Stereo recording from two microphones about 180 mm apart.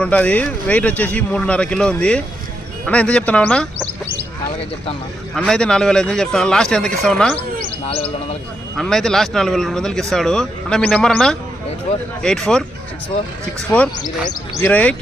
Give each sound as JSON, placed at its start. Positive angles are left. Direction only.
{"t": 0.0, "sound": "speech", "side_deg": 5}
{"t": 5.3, "sound": "speech", "side_deg": 5}
{"t": 7.6, "sound": "bird", "side_deg": 30}
{"t": 8.8, "sound": "speech", "side_deg": 5}
{"t": 13.9, "sound": "speech", "side_deg": 20}
{"t": 14.6, "sound": "speech", "side_deg": 10}